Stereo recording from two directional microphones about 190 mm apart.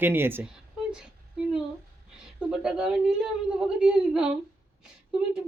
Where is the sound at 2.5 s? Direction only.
5° right (ahead or behind).